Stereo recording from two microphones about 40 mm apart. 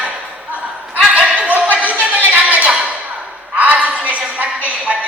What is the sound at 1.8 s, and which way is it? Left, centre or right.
Music, right.